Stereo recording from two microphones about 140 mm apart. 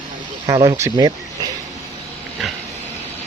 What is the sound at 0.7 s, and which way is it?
Speech, 25° right (ahead or behind).